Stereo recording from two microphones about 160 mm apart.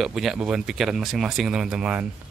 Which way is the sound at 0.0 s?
Centre (ahead or behind).